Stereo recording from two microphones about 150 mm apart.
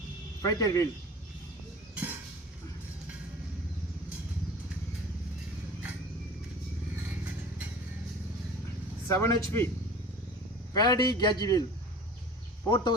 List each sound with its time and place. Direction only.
0.4 s a man's voice: 20° left (ahead or behind)
9.0 s a man's voice: 20° left (ahead or behind)
10.8 s a man's voice: 25° left (ahead or behind)
12.7 s a man's voice: 30° left (ahead or behind)